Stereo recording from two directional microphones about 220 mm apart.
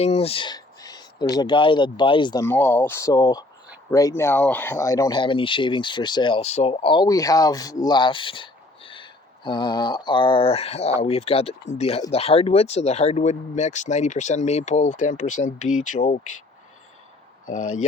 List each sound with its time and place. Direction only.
0.0 s speech: 30° left (ahead or behind)
17.4 s speech: 35° left (ahead or behind)